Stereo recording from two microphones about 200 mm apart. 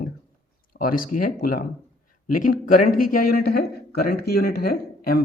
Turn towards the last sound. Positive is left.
turn(degrees=50)  # may be behind; listen again after turning